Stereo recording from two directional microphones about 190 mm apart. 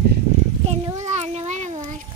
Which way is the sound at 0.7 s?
35° right (ahead or behind).